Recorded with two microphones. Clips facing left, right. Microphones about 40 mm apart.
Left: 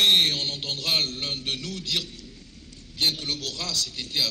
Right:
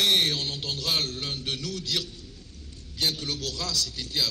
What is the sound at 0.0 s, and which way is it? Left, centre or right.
Mantra, left.